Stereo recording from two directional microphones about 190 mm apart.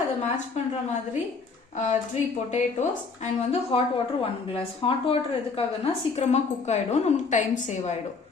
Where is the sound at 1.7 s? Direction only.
40° left (ahead or behind).